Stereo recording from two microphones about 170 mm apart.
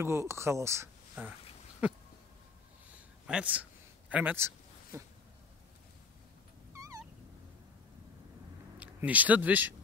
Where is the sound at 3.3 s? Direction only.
5° right (ahead or behind).